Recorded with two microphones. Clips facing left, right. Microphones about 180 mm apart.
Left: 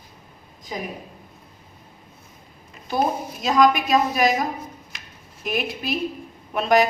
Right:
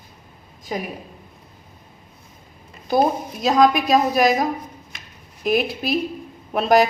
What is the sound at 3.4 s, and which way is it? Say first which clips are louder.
Speech: right 2 dB; 35° right (ahead or behind).